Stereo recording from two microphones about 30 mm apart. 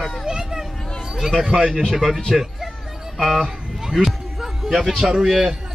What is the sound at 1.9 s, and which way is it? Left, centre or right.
Speech, centre.